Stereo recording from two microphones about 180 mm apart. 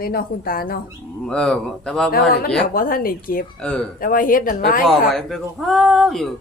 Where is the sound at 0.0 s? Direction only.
55° left (ahead or behind).